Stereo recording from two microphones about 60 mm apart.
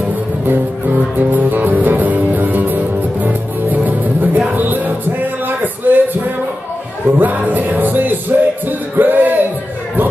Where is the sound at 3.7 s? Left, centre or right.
Right.